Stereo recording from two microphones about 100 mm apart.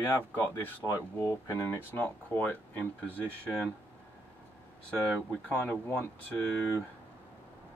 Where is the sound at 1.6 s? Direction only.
20° left (ahead or behind).